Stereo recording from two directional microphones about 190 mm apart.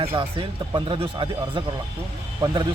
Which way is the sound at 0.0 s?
15° right (ahead or behind).